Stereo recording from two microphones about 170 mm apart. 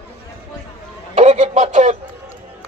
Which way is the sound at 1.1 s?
45° right (ahead or behind).